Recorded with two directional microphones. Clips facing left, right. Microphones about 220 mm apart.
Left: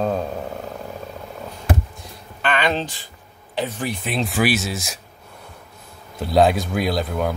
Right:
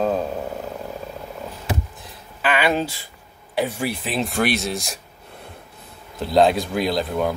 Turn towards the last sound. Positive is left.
turn(degrees=0)  # may be behind; listen again after turning